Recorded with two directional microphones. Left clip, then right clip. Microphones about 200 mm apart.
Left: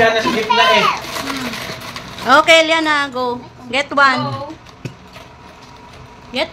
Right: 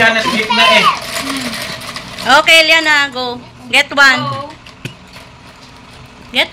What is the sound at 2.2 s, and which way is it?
A woman's voice, 10° left (ahead or behind).